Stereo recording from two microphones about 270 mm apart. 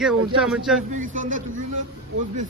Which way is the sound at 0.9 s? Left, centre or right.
Right.